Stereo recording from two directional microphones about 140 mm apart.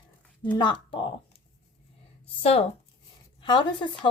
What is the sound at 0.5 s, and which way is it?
Speech, 35° left (ahead or behind).